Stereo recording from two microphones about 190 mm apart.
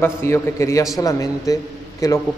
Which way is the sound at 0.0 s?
10° left (ahead or behind).